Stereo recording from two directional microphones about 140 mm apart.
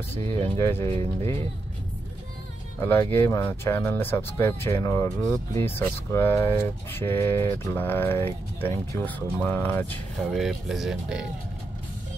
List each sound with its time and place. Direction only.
0.4 s speech: 15° left (ahead or behind)
0.9 s speech: 40° right (ahead or behind)
2.8 s speech: 15° left (ahead or behind)
10.3 s speech: centre (ahead or behind)